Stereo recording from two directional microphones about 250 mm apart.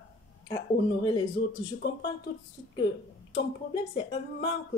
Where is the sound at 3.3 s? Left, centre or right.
Centre.